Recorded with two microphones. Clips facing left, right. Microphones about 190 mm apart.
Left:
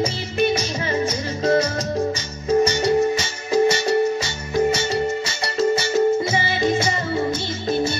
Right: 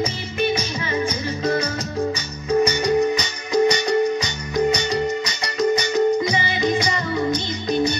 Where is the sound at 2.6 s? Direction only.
15° right (ahead or behind).